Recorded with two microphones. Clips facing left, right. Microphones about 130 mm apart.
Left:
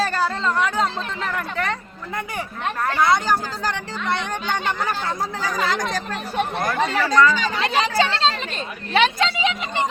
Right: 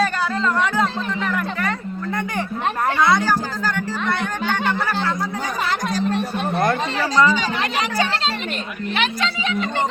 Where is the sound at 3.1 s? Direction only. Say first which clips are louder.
Right 1 dB; 20° left (ahead or behind).